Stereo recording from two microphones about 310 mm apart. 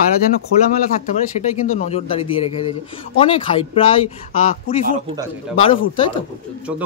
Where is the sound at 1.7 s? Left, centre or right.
Centre.